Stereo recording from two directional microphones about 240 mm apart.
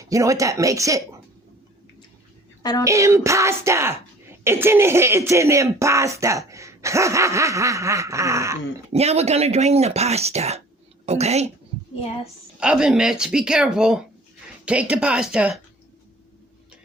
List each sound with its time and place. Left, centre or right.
0.0 s speech: centre
2.8 s speech: centre
8.9 s a woman's voice: right
12.5 s speech: centre